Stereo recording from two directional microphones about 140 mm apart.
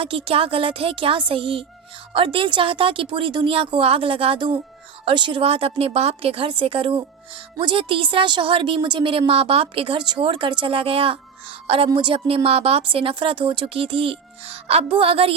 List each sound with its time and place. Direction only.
0.0 s a woman's voice: 40° right (ahead or behind)